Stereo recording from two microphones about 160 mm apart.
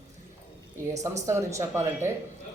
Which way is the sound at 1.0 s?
20° right (ahead or behind).